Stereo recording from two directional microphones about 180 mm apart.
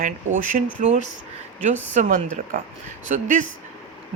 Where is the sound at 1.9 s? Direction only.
45° right (ahead or behind).